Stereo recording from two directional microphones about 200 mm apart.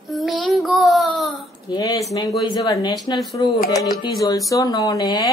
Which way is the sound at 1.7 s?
15° left (ahead or behind).